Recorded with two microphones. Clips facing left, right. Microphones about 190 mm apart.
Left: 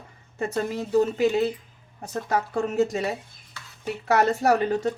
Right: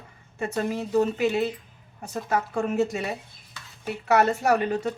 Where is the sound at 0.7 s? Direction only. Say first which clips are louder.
Left 2 dB; 35° left (ahead or behind).